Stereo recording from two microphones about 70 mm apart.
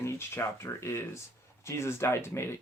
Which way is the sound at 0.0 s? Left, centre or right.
Left.